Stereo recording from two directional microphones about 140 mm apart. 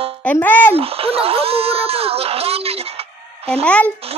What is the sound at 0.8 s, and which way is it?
Speech, 45° right (ahead or behind).